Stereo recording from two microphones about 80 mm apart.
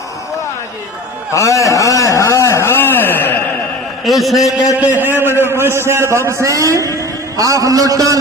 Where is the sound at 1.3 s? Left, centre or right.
Left.